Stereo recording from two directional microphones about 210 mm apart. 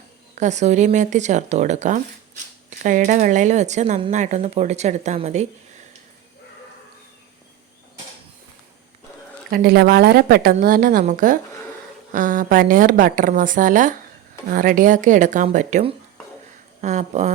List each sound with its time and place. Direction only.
0.3 s a woman's voice: 35° right (ahead or behind)
9.5 s a woman's voice: 50° right (ahead or behind)